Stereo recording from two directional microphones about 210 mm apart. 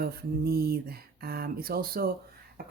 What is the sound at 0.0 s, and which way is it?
Speech, 45° right (ahead or behind).